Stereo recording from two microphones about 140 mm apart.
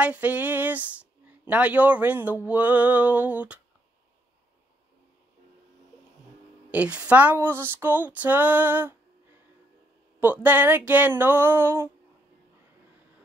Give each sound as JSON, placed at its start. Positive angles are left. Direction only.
{"t": 0.0, "sound": "speech", "side_deg": -10}
{"t": 6.7, "sound": "speech", "side_deg": -10}
{"t": 10.2, "sound": "speech", "side_deg": -10}